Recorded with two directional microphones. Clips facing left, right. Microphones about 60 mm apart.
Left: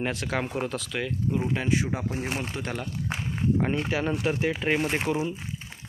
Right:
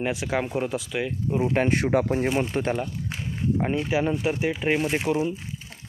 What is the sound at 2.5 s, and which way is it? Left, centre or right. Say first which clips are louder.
Speech: right 8 dB; right.